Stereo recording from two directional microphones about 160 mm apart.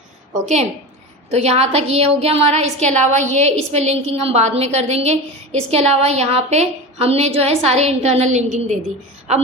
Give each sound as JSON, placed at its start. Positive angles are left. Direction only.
{"t": 1.3, "sound": "a woman's voice", "side_deg": -40}